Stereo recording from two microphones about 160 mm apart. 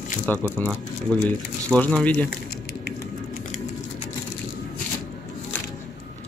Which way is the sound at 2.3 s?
80° left.